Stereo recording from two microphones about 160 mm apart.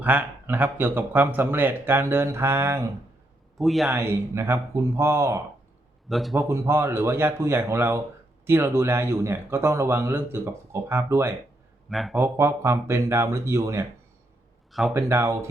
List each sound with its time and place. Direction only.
0.0 s speech: 10° right (ahead or behind)
3.6 s speech: centre (ahead or behind)
3.9 s speech: 15° right (ahead or behind)
6.1 s speech: centre (ahead or behind)
6.3 s speech: 15° right (ahead or behind)
11.9 s speech: centre (ahead or behind)
12.1 s speech: 15° right (ahead or behind)
14.7 s speech: centre (ahead or behind)
14.9 s speech: 15° right (ahead or behind)